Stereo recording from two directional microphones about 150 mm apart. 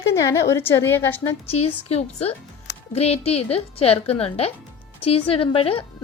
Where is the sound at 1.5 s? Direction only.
45° left (ahead or behind).